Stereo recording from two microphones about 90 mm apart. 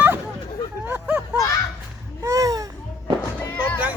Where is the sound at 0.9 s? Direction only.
20° right (ahead or behind).